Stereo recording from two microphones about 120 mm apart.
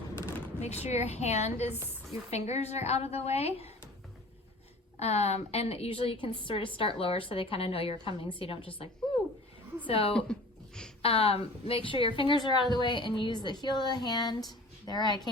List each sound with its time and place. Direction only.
0.6 s a woman's voice: 65° left (ahead or behind)
4.9 s a woman's voice: 65° left (ahead or behind); by 15.3 s 35° left (ahead or behind)